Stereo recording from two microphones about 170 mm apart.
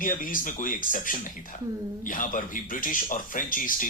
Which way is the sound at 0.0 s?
50° left (ahead or behind).